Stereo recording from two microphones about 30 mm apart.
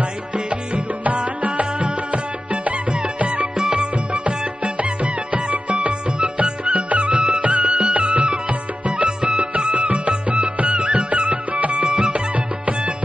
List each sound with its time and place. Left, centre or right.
0.5 s music: right
3.5 s music: right
11.8 s music: right